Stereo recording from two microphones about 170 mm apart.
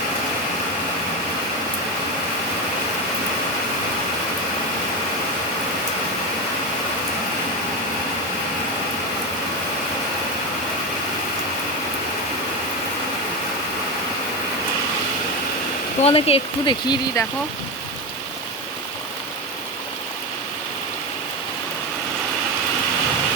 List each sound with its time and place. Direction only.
16.0 s speech: 35° left (ahead or behind)